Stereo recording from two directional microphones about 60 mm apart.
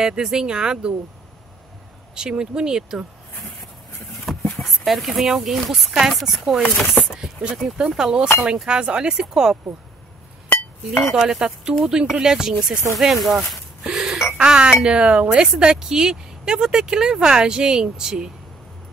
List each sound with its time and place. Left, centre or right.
0.0 s speech: centre
2.1 s speech: centre
4.3 s a sound: centre
4.6 s speech: centre
8.6 s speech: centre
11.1 s speech: centre
13.8 s telephone dialing: centre
14.4 s speech: centre
15.2 s speech: centre